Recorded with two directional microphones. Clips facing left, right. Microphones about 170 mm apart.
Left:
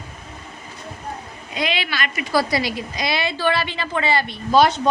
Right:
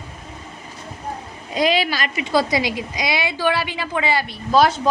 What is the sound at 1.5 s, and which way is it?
Speech, 40° right (ahead or behind).